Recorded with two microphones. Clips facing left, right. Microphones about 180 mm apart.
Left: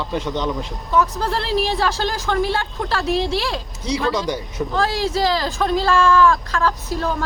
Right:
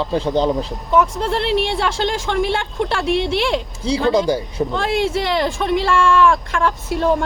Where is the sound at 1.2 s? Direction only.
25° right (ahead or behind).